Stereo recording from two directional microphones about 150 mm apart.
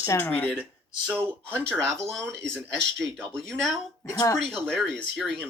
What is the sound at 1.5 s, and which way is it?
Speech, 5° left (ahead or behind).